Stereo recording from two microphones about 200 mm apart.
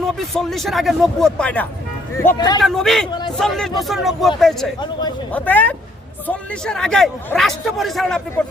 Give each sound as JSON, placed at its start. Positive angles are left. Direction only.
{"t": 0.2, "sound": "a man's voice", "side_deg": 0}
{"t": 2.1, "sound": "speech", "side_deg": 15}
{"t": 2.6, "sound": "a man's voice", "side_deg": 0}
{"t": 3.1, "sound": "a man's voice", "side_deg": 20}
{"t": 3.3, "sound": "a man's voice", "side_deg": 0}
{"t": 4.8, "sound": "speech", "side_deg": 20}
{"t": 5.3, "sound": "a man's voice", "side_deg": 10}